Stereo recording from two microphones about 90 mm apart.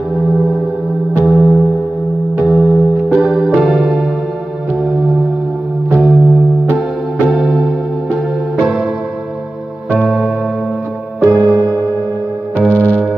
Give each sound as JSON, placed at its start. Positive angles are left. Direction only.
{"t": 1.2, "sound": "music", "side_deg": -10}
{"t": 3.3, "sound": "music", "side_deg": -5}
{"t": 6.0, "sound": "music", "side_deg": -5}
{"t": 9.9, "sound": "music", "side_deg": -10}
{"t": 11.2, "sound": "music", "side_deg": -35}
{"t": 12.5, "sound": "music", "side_deg": 15}